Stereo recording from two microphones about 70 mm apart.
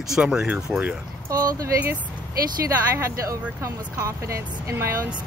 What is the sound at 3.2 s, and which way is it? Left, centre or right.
Speech, right.